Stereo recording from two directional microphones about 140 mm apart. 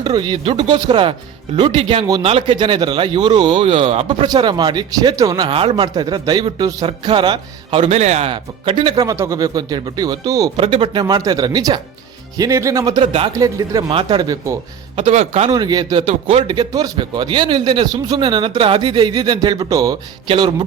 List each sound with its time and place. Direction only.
0.0 s a man's voice: 30° right (ahead or behind)
3.6 s a man's voice: 45° right (ahead or behind); by 5.5 s 25° right (ahead or behind)
5.5 s a man's voice: 40° right (ahead or behind)
7.9 s speech: 50° right (ahead or behind)
8.3 s speech: 40° right (ahead or behind)
10.6 s a man's voice: 40° right (ahead or behind)
11.0 s speech: 25° right (ahead or behind)
13.0 s a man's voice: 40° right (ahead or behind)
13.3 s speech: 25° right (ahead or behind)
15.1 s speech: 50° right (ahead or behind)
15.5 s a man's voice: 30° right (ahead or behind)
16.0 s speech: 45° right (ahead or behind)
16.6 s a man's voice: 25° right (ahead or behind)